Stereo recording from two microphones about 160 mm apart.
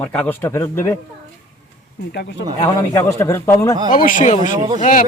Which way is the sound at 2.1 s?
90° left.